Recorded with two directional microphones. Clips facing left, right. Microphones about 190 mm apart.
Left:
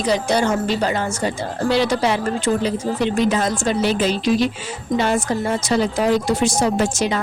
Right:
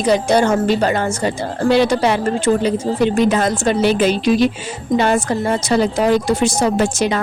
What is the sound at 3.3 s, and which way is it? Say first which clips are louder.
A woman's voice: right 3 dB; 65° right (ahead or behind).